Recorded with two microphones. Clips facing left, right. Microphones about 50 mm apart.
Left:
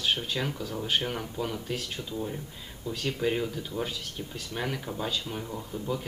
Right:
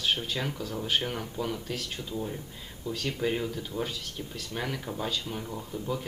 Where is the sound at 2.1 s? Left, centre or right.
Centre.